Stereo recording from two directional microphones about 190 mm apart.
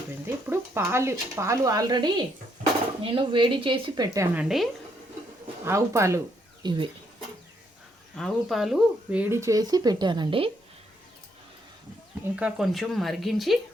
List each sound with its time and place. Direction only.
0.4 s speech: 15° right (ahead or behind)
4.4 s speech: centre (ahead or behind)
5.6 s speech: 15° right (ahead or behind)
8.1 s speech: centre (ahead or behind); by 10.5 s 25° right (ahead or behind)
12.4 s speech: 5° right (ahead or behind)